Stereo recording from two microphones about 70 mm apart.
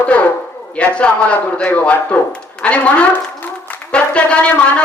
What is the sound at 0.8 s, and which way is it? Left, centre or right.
A woman's voice, centre.